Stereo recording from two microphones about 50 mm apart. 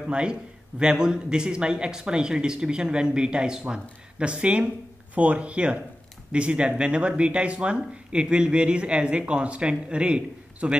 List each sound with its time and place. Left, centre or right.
0.1 s a man's voice: centre